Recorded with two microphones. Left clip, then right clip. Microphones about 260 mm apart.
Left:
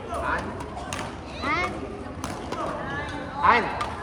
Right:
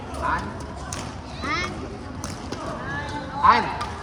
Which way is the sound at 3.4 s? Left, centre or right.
Centre.